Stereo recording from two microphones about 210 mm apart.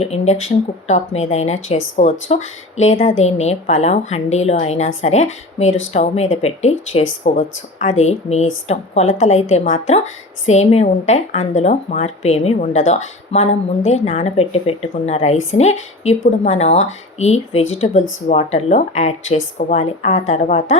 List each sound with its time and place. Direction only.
0.0 s speech: 30° left (ahead or behind)